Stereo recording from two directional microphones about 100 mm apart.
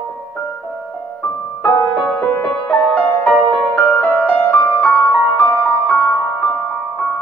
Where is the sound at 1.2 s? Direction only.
10° left (ahead or behind).